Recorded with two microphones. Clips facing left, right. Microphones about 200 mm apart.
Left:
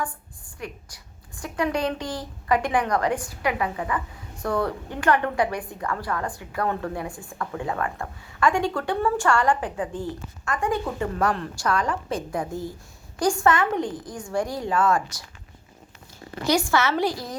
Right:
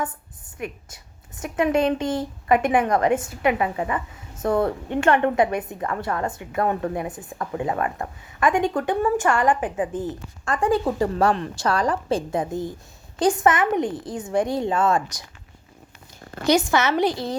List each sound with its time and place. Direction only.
0.0 s a woman's voice: 20° right (ahead or behind)
10.4 s a woman's voice: 30° right (ahead or behind)
16.5 s a woman's voice: 20° right (ahead or behind)